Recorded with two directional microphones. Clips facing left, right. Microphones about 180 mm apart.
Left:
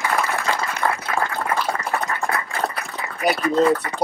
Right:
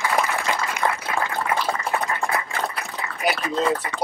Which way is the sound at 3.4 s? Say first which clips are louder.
Left 7 dB; 60° left (ahead or behind).